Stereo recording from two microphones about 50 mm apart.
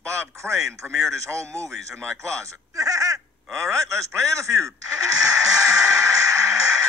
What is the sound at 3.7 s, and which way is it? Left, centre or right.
Speech, right.